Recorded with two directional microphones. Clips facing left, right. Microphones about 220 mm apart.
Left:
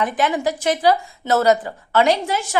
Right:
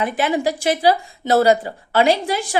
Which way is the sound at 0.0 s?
25° right (ahead or behind).